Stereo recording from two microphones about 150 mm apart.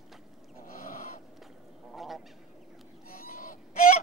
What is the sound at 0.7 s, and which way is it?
Goat, 65° left (ahead or behind).